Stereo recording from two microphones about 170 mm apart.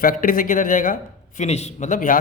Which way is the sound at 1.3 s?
40° left (ahead or behind).